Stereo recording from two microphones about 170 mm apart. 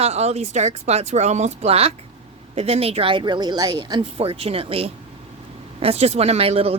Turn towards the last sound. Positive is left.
turn(degrees=-35)  # may be behind; listen again after turning